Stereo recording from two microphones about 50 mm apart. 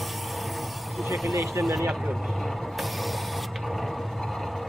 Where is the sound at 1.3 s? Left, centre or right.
Right.